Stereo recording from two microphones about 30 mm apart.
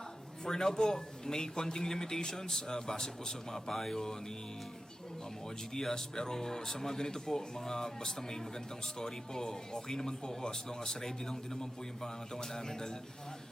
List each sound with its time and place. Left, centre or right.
0.4 s speech: centre
5.7 s speech: centre